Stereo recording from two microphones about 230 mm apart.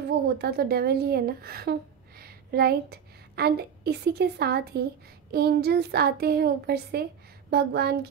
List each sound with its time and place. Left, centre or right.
0.4 s a woman's voice: right